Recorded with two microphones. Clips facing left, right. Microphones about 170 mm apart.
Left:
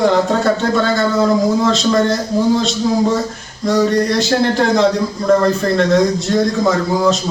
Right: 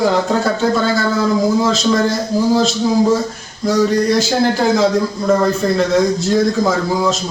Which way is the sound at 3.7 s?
Centre (ahead or behind).